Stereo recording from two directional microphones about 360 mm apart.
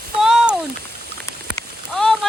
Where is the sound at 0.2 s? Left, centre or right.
Centre.